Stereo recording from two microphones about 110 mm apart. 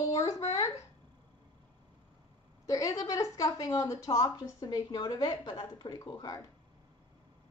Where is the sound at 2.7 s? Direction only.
30° left (ahead or behind).